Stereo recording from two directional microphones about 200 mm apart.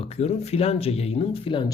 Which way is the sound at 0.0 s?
30° left (ahead or behind).